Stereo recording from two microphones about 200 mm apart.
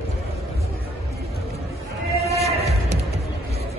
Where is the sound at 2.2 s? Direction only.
30° right (ahead or behind).